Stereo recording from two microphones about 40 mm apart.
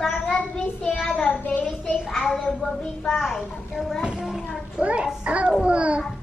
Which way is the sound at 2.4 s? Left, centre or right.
Centre.